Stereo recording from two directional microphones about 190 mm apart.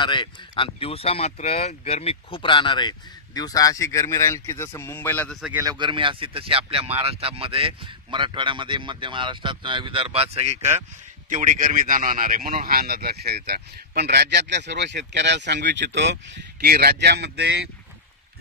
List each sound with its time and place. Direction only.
0.0 s speech: 25° left (ahead or behind); by 5.4 s 10° left (ahead or behind)
5.6 s a man's voice: 20° right (ahead or behind); by 17.6 s 60° right (ahead or behind)